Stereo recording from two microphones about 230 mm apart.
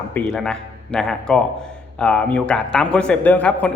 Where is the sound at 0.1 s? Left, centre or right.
Centre.